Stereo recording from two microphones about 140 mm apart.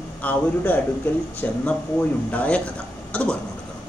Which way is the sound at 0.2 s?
10° left (ahead or behind).